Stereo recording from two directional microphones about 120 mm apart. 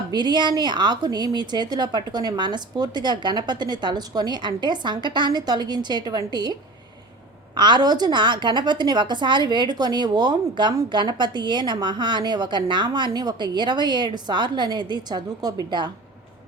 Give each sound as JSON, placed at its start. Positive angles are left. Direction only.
{"t": 0.1, "sound": "a woman's voice", "side_deg": -35}